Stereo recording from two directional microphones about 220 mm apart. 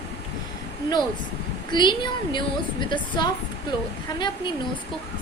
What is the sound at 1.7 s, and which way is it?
A woman's voice, 20° left (ahead or behind).